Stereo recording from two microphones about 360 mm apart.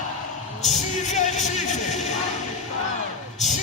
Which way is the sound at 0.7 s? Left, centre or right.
Centre.